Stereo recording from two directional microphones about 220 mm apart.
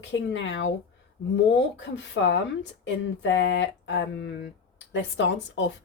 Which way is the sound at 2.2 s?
55° left (ahead or behind).